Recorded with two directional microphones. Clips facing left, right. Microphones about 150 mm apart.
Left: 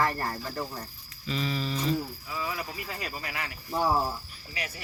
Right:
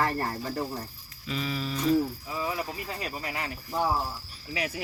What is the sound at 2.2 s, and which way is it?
Speech, 25° right (ahead or behind).